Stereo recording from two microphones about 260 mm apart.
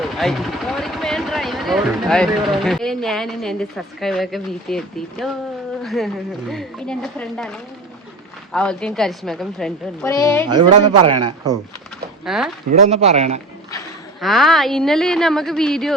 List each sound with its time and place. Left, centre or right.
0.0 s speech: centre
10.5 s a man's voice: centre
12.2 s speech: centre
12.8 s a man's voice: right
14.2 s speech: centre